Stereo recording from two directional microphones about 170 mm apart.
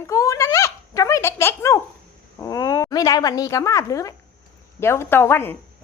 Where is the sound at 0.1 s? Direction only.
20° left (ahead or behind).